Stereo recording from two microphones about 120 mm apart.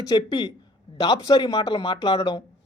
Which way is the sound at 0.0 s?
35° left (ahead or behind).